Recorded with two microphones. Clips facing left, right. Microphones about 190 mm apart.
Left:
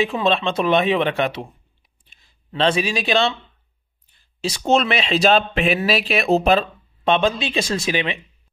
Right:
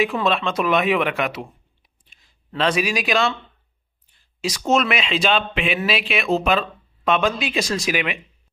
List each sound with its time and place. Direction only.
0.0 s speech: 25° left (ahead or behind)
4.4 s speech: 30° left (ahead or behind)